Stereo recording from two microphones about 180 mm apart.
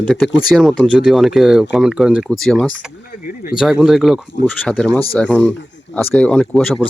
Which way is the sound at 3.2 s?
50° left (ahead or behind).